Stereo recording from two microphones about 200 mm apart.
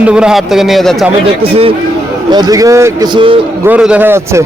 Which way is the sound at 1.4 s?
30° right (ahead or behind).